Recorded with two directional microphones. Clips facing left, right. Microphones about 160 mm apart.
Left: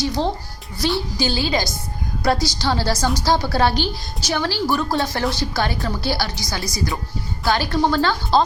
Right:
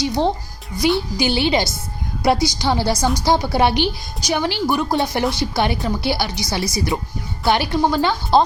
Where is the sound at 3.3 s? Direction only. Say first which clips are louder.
Right 2 dB; 20° right (ahead or behind).